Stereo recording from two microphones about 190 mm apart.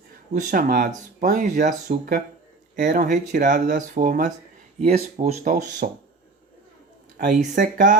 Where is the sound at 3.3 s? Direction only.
45° right (ahead or behind).